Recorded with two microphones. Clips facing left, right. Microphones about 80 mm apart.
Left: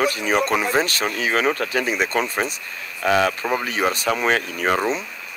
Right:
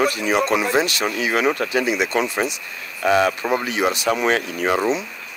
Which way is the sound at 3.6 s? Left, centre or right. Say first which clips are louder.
Right 1 dB; left.